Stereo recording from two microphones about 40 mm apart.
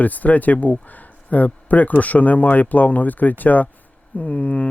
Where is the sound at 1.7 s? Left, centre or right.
Left.